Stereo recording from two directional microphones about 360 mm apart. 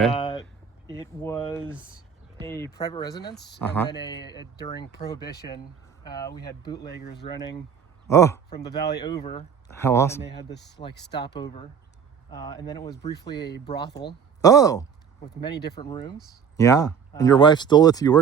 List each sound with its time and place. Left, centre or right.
0.1 s a sound: centre
0.9 s speech: centre
3.3 s speech: left
3.6 s speech: centre
6.8 s speech: left
8.0 s speech: centre
8.5 s speech: left
9.0 s speech: centre
10.2 s speech: left
11.3 s speech: centre
13.4 s speech: left
14.4 s speech: centre
15.5 s speech: left
15.8 s speech: centre